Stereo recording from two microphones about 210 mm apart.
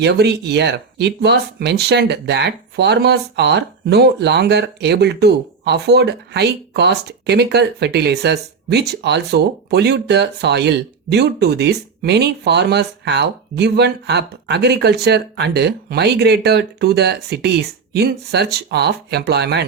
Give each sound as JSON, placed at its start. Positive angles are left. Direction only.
{"t": 0.0, "sound": "speech", "side_deg": -55}